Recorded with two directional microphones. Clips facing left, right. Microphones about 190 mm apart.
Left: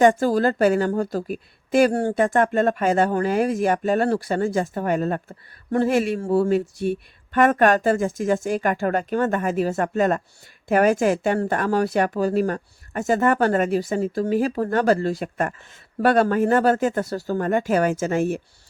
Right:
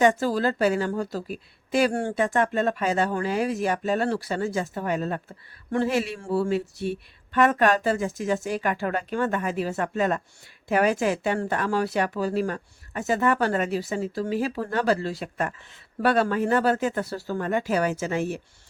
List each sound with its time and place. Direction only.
0.0 s speech: 50° left (ahead or behind)